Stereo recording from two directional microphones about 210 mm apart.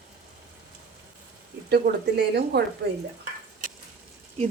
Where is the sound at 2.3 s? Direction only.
50° right (ahead or behind).